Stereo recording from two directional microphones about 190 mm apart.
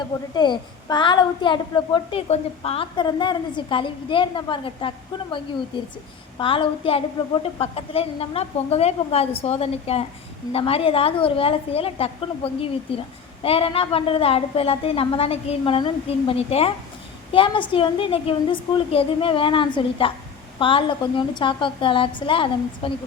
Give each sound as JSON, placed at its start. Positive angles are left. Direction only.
{"t": 0.0, "sound": "a woman's voice", "side_deg": 25}
{"t": 6.4, "sound": "a woman's voice", "side_deg": 30}